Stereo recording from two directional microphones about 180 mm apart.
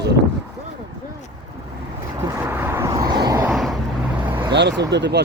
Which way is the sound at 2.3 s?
10° right (ahead or behind).